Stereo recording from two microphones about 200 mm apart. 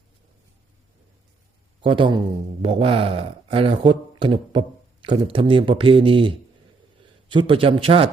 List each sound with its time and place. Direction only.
1.8 s speech: 25° right (ahead or behind)